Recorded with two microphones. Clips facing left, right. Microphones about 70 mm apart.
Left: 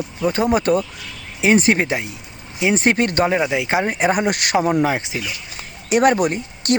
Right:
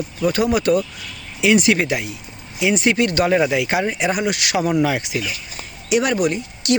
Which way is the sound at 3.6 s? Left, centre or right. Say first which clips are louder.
Left 1 dB; left.